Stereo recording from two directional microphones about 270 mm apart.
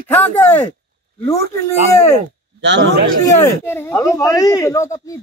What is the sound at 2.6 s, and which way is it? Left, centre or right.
Speech, right.